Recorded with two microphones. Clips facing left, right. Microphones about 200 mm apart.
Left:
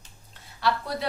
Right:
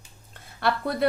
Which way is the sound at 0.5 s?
55° right (ahead or behind).